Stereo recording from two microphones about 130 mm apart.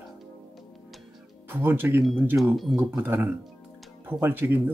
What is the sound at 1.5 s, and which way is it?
Speech, 15° right (ahead or behind).